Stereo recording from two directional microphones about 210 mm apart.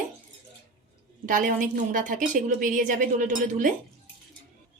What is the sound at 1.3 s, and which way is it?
A woman's voice, 40° right (ahead or behind).